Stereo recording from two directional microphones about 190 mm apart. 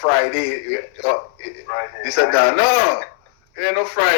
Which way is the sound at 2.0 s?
45° left (ahead or behind).